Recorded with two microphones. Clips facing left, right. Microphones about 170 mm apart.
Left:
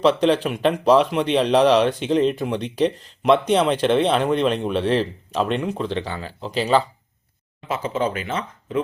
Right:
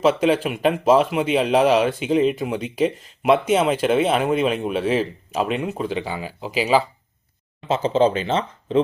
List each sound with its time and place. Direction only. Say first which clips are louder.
0.0 s speech: even; 5° right (ahead or behind)
7.7 s speech: right 6 dB; 30° right (ahead or behind)